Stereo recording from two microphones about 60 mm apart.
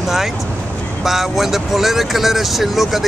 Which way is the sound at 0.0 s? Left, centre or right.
Centre.